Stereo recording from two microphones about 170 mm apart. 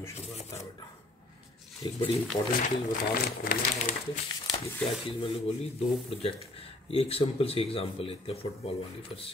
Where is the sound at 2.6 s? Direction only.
55° left (ahead or behind).